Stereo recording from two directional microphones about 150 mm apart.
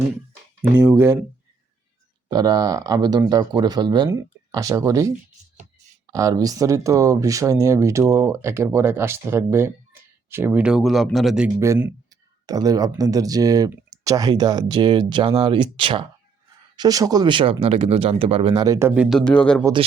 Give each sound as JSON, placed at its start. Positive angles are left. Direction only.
{"t": 0.8, "sound": "speech", "side_deg": -15}
{"t": 2.3, "sound": "speech", "side_deg": -25}
{"t": 11.6, "sound": "speech", "side_deg": -20}
{"t": 16.7, "sound": "speech", "side_deg": -25}
{"t": 18.6, "sound": "speech", "side_deg": -20}
{"t": 18.9, "sound": "speech", "side_deg": 0}